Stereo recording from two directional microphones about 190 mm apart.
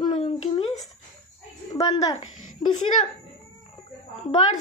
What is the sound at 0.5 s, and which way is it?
Speech, 30° left (ahead or behind).